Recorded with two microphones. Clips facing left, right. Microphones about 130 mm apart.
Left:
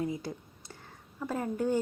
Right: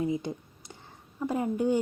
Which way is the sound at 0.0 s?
20° right (ahead or behind).